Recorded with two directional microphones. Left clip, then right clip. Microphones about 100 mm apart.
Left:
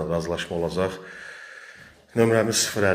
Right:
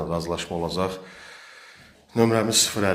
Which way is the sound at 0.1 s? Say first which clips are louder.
Left 1 dB; 15° right (ahead or behind).